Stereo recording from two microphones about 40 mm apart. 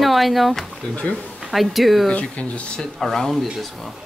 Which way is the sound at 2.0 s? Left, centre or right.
Left.